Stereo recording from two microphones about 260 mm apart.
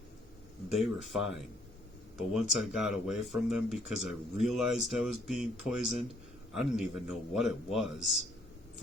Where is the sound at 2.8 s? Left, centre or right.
Centre.